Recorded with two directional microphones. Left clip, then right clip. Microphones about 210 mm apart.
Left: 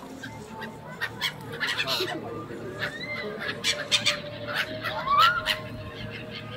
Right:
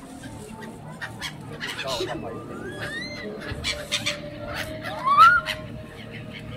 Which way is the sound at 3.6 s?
35° left (ahead or behind).